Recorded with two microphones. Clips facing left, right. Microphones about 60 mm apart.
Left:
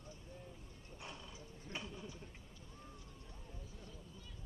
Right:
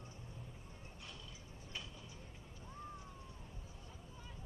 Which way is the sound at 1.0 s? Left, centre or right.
Left.